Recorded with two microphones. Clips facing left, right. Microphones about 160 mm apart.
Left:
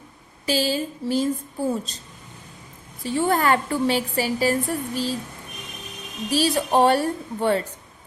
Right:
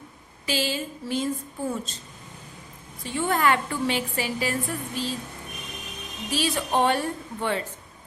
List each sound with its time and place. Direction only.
0.4 s a woman's voice: 40° left (ahead or behind)
3.0 s a woman's voice: 35° left (ahead or behind)
6.3 s a woman's voice: 35° left (ahead or behind)